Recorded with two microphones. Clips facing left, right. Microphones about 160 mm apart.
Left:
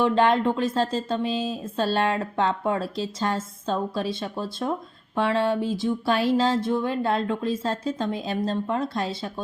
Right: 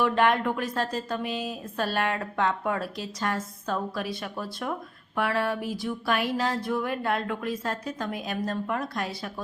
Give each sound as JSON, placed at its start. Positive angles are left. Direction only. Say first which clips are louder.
{"t": 0.0, "sound": "a woman's voice", "louder": "left 3 dB", "side_deg": 30}